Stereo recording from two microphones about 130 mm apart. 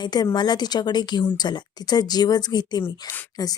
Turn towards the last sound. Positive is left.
turn(degrees=30)  # may be behind; listen again after turning